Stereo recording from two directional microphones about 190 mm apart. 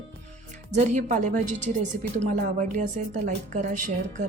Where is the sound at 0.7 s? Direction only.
40° right (ahead or behind).